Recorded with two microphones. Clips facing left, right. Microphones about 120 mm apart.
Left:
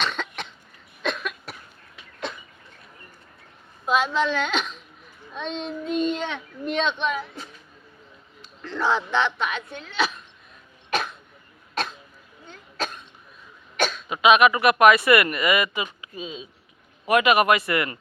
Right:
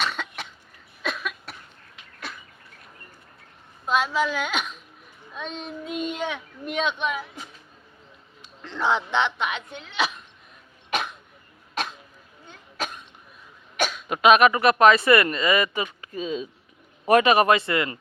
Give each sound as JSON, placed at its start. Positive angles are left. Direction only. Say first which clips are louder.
{"t": 0.0, "sound": "cough", "louder": "left 1 dB", "side_deg": -10}
{"t": 2.3, "sound": "a sound", "louder": "left 4 dB", "side_deg": 20}
{"t": 3.8, "sound": "speech", "louder": "left 1 dB", "side_deg": 0}
{"t": 10.9, "sound": "cough", "louder": "left 1 dB", "side_deg": -15}
{"t": 11.7, "sound": "throat clearing", "louder": "left 1 dB", "side_deg": -15}
{"t": 12.5, "sound": "cough", "louder": "left 2 dB", "side_deg": -15}
{"t": 14.1, "sound": "speech", "louder": "right 1 dB", "side_deg": -45}
{"t": 17.1, "sound": "speech", "louder": "right 1 dB", "side_deg": -35}